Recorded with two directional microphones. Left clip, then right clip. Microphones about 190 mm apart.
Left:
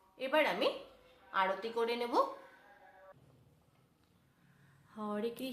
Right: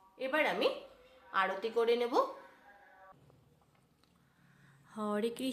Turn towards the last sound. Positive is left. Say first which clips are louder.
# right 3 dB
turn(degrees=-40)  # may be behind; listen again after turning